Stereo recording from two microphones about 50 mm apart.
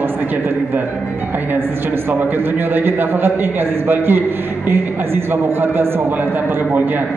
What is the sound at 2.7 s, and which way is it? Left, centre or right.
Speech, right.